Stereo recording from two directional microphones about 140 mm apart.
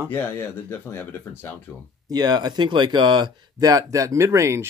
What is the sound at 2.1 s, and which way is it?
Speech, 30° right (ahead or behind).